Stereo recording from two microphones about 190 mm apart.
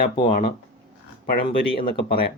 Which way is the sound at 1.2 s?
50° left (ahead or behind).